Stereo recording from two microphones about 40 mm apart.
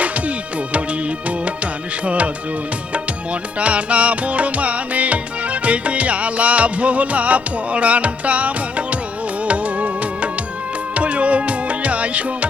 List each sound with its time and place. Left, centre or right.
2.0 s music: right
3.6 s music: right